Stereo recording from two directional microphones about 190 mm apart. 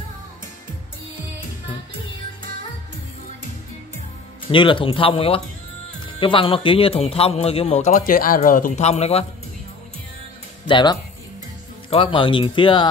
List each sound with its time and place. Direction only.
4.5 s speech: 25° left (ahead or behind)
10.7 s speech: 25° left (ahead or behind)